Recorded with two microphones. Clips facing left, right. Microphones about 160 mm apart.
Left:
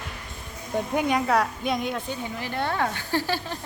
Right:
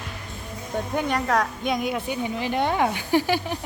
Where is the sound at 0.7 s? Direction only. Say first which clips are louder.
Left 1 dB; 10° left (ahead or behind).